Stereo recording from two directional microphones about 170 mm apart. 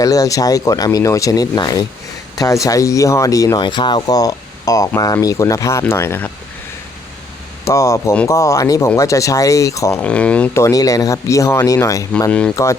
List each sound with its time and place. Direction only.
0.0 s speech: 20° left (ahead or behind)
7.6 s speech: 15° left (ahead or behind)
10.0 s speech: 5° left (ahead or behind)
12.3 s speech: 5° left (ahead or behind)